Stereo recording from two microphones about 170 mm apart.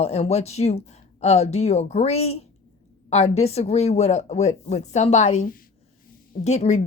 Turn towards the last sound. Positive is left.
turn(degrees=40)  # may be behind; listen again after turning